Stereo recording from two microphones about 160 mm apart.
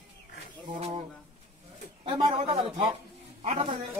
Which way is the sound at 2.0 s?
35° right (ahead or behind).